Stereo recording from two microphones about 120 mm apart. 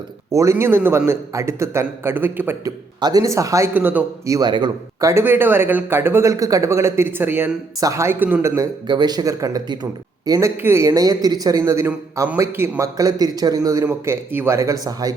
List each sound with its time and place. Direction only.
0.3 s speech: 25° right (ahead or behind)
3.0 s speech: 30° right (ahead or behind)
3.8 s a man's voice: 15° right (ahead or behind)
4.3 s speech: 35° right (ahead or behind)